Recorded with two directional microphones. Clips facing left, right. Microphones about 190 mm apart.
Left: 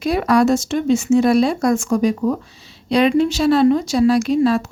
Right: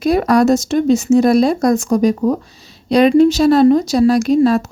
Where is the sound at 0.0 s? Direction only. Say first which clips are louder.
Right 3 dB; 40° right (ahead or behind).